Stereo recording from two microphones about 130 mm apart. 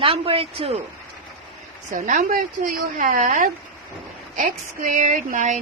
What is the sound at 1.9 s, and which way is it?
Speech, 90° right.